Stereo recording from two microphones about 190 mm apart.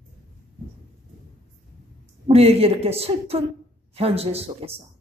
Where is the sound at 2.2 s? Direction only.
30° right (ahead or behind).